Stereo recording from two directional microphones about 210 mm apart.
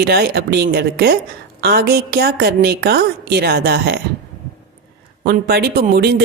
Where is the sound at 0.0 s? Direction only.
50° right (ahead or behind).